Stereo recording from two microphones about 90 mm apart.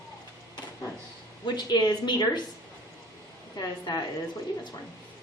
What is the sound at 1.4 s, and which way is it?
Speech, 55° left (ahead or behind).